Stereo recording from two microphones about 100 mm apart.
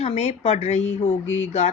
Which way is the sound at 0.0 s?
90° left.